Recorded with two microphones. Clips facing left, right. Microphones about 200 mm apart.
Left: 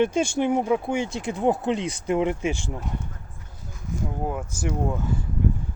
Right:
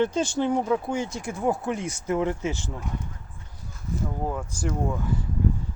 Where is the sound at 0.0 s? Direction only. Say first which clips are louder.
Left 2 dB; 15° left (ahead or behind).